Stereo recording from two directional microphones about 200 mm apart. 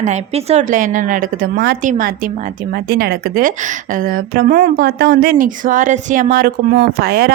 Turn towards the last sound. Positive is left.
turn(degrees=-50)  # may be behind; listen again after turning